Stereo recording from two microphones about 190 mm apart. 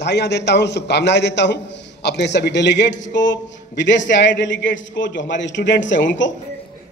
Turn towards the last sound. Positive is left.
turn(degrees=75)  # may be behind; listen again after turning